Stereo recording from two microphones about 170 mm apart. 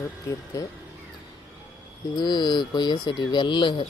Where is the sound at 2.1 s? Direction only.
25° left (ahead or behind).